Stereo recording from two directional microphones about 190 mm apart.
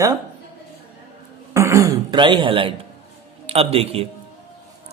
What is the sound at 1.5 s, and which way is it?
A man's voice, 15° right (ahead or behind).